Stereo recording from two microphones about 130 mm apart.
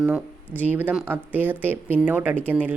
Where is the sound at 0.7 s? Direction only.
15° right (ahead or behind).